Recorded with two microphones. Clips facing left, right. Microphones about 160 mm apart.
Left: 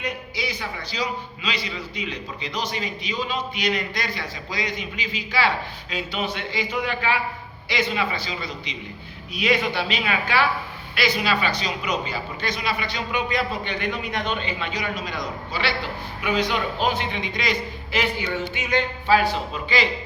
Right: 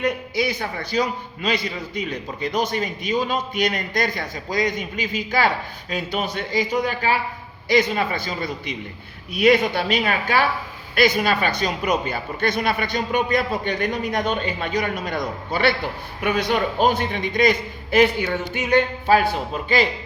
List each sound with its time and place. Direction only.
0.0 s a man's voice: 50° right (ahead or behind)